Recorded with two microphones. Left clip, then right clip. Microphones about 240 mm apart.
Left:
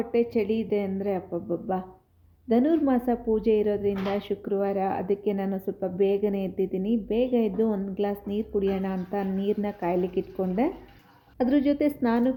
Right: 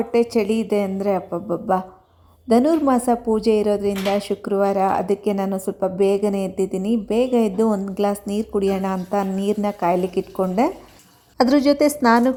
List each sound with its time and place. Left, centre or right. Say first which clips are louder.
0.0 s a woman's voice: right 6 dB; right
11.9 s a woman's voice: right 9 dB; centre